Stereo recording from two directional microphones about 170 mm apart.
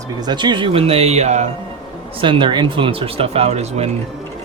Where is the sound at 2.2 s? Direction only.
30° right (ahead or behind).